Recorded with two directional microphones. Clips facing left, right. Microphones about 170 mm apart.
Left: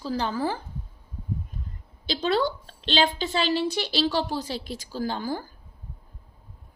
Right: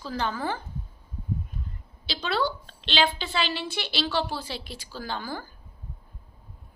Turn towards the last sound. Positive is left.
turn(degrees=40)  # may be behind; listen again after turning